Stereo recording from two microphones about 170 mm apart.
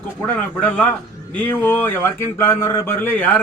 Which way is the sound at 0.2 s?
10° left (ahead or behind).